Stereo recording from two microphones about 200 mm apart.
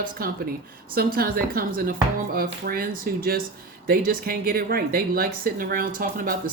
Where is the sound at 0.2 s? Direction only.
45° right (ahead or behind).